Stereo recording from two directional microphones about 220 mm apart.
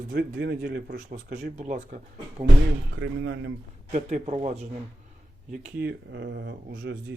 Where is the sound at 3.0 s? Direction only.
60° right (ahead or behind).